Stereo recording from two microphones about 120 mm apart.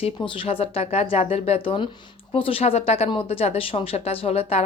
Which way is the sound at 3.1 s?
50° left (ahead or behind).